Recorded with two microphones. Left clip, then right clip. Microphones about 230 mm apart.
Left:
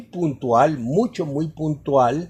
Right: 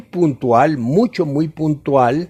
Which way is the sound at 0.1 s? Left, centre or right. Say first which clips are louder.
Right 5 dB; right.